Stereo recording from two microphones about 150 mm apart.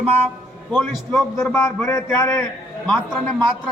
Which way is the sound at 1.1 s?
15° left (ahead or behind).